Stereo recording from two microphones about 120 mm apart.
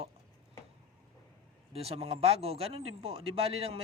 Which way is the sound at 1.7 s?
55° right (ahead or behind).